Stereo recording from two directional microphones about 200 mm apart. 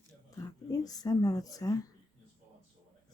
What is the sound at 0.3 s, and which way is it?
Speech, 20° left (ahead or behind).